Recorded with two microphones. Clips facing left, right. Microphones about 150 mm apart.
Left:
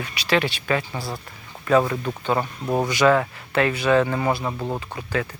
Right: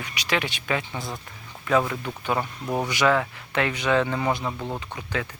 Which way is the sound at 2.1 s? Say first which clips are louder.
Left 3 dB; 20° left (ahead or behind).